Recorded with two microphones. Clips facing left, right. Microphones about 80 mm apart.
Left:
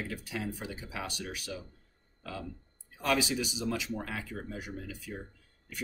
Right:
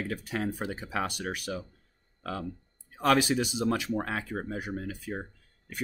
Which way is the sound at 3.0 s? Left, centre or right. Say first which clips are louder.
Right 6 dB; right.